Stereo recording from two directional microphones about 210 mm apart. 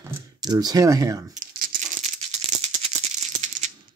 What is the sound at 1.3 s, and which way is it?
Rattle, 40° right (ahead or behind).